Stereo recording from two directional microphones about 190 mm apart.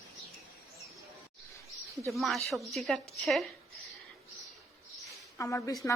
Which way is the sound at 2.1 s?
Centre (ahead or behind).